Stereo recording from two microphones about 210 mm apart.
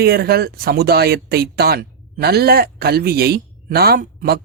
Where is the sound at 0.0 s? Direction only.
50° right (ahead or behind).